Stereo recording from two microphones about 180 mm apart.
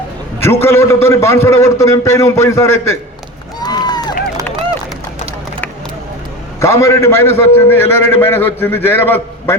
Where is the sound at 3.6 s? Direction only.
25° left (ahead or behind).